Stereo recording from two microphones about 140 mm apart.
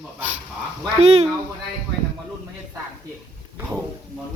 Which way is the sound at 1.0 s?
50° right (ahead or behind).